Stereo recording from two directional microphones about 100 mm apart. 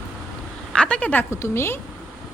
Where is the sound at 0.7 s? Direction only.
10° left (ahead or behind).